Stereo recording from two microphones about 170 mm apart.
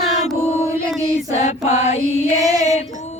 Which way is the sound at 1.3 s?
40° left (ahead or behind).